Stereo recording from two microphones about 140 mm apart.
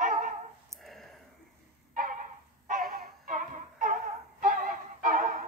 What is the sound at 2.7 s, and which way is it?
Music, 90° right.